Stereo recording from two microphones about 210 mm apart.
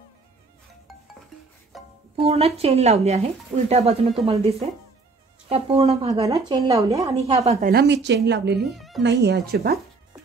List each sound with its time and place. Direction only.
1.7 s music: centre (ahead or behind)
2.1 s speech: 30° right (ahead or behind)
6.2 s speech: 15° right (ahead or behind)
7.2 s speech: 30° right (ahead or behind)
7.7 s a woman's voice: 55° right (ahead or behind)
8.6 s speech: centre (ahead or behind)
9.0 s speech: 55° right (ahead or behind)